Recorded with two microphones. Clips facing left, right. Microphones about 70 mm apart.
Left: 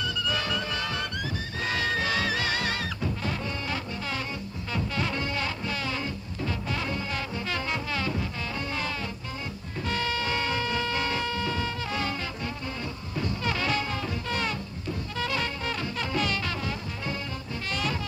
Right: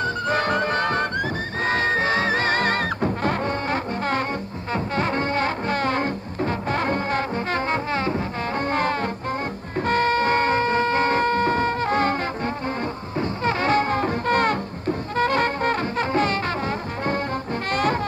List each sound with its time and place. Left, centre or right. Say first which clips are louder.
0.0 s music: right 8 dB; right
13.2 s music: right 7 dB; right